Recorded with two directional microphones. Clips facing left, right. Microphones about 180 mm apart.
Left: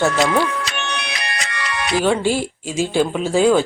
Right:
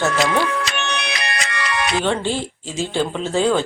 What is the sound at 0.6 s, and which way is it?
Music, 90° right.